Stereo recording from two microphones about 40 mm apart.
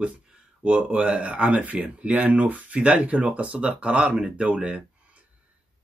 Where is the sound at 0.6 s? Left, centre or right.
Right.